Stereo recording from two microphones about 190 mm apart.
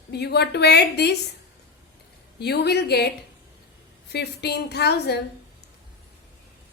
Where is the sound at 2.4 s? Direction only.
60° left (ahead or behind).